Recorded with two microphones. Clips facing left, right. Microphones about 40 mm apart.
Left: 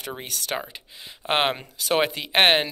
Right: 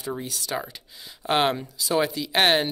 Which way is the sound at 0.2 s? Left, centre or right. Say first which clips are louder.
Left 1 dB; left.